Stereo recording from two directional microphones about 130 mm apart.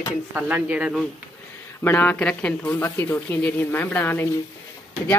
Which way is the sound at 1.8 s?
15° left (ahead or behind).